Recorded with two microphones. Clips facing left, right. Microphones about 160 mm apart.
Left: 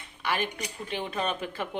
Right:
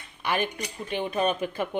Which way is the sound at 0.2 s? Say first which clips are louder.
Right 3 dB; 20° right (ahead or behind).